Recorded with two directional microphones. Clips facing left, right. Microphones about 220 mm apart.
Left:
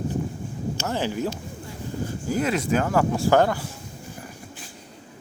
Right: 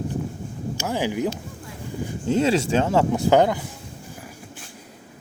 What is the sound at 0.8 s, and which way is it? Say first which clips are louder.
Speech: right 3 dB; 15° right (ahead or behind).